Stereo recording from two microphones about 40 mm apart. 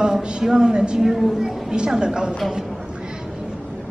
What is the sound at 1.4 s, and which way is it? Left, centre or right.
Speech, centre.